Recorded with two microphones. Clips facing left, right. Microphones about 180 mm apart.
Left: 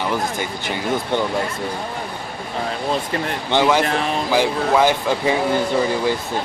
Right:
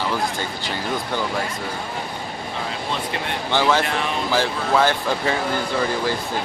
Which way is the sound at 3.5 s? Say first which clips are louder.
Left 3 dB; 15° left (ahead or behind).